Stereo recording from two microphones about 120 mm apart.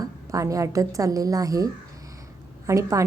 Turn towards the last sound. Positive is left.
turn(degrees=-25)  # may be behind; listen again after turning